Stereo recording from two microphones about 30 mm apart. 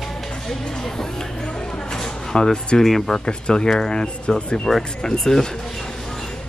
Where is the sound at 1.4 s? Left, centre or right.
Left.